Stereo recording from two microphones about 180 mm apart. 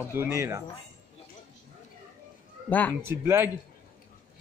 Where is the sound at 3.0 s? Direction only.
15° right (ahead or behind).